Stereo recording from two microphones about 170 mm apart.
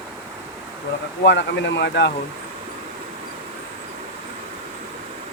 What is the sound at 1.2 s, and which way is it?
Speech, 90° left.